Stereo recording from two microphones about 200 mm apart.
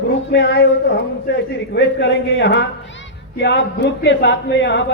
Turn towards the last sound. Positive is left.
turn(degrees=60)  # may be behind; listen again after turning